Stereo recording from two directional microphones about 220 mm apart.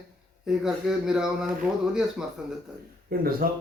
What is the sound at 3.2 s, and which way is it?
Speech, 40° right (ahead or behind).